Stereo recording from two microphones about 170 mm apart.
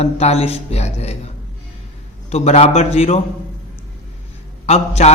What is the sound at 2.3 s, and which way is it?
Speech, 40° left (ahead or behind).